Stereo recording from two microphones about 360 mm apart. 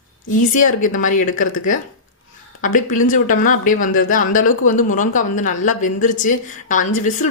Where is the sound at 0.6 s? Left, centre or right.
Left.